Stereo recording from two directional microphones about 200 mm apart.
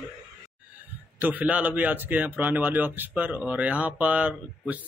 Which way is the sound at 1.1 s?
10° right (ahead or behind).